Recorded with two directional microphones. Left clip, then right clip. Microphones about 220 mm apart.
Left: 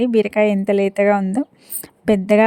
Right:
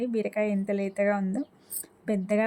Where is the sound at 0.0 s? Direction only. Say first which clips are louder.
Left 12 dB; 40° left (ahead or behind).